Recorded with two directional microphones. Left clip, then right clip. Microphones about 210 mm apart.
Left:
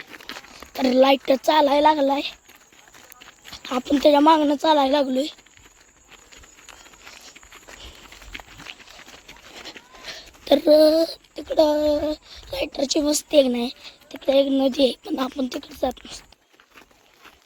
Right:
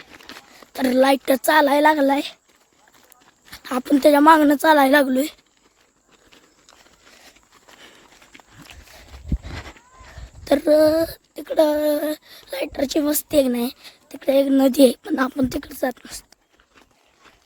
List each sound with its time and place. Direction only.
0.7 s speech: 20° right (ahead or behind)
1.5 s speech: 60° right (ahead or behind); by 2.3 s 75° right (ahead or behind)
3.7 s a woman's voice: 25° right (ahead or behind)
4.6 s a woman's voice: 60° right (ahead or behind)
7.8 s a sound: 10° right (ahead or behind)
10.4 s speech: 15° right (ahead or behind)
13.5 s a woman's voice: 55° right (ahead or behind)
14.9 s speech: 25° right (ahead or behind)
15.4 s speech: 70° right (ahead or behind)
15.8 s speech: 25° right (ahead or behind)